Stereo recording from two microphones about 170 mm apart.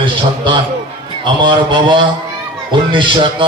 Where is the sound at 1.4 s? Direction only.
30° right (ahead or behind).